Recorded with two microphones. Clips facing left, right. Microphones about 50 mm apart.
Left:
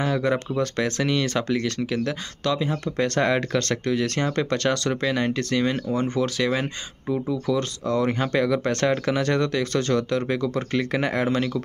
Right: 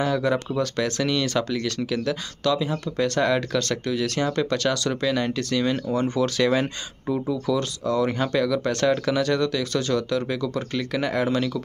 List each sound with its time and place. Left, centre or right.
0.0 s speech: centre
6.3 s speech: centre
7.5 s speech: left